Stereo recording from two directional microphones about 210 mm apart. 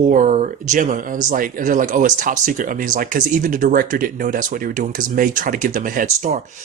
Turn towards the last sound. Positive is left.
turn(degrees=-35)  # may be behind; listen again after turning